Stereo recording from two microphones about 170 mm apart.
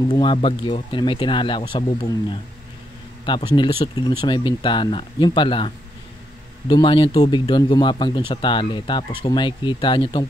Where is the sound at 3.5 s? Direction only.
25° left (ahead or behind).